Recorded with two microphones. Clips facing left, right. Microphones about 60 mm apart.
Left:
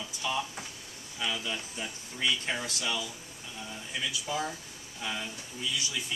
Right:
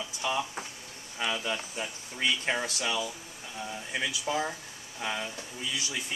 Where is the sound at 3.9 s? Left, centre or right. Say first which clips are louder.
Right 3 dB; right.